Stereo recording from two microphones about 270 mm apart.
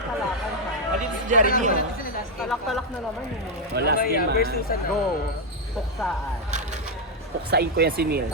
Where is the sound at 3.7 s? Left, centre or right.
Right.